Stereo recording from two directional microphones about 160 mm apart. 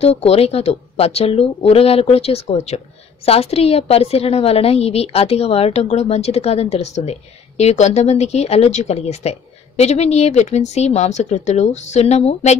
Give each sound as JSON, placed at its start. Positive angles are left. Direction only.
{"t": 0.0, "sound": "a woman's voice", "side_deg": 40}